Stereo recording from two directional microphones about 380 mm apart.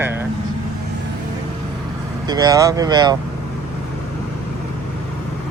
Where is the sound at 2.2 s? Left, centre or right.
Centre.